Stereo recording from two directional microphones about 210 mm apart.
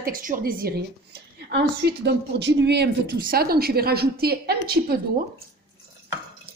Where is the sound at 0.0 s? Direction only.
40° right (ahead or behind).